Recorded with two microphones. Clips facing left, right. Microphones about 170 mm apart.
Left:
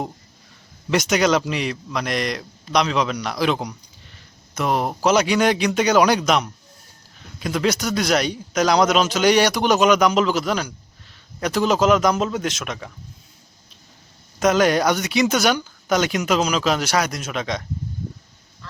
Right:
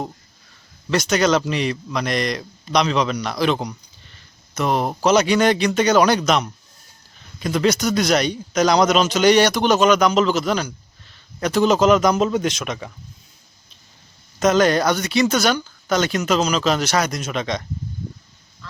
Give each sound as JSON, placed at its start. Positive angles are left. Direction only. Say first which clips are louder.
{"t": 0.9, "sound": "a man's voice", "louder": "even", "side_deg": 15}
{"t": 14.3, "sound": "speech", "louder": "right 1 dB", "side_deg": 10}